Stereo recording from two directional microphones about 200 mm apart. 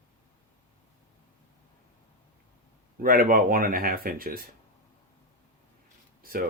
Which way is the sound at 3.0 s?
45° right (ahead or behind).